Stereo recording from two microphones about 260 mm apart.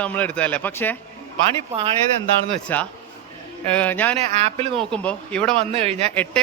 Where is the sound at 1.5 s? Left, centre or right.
Right.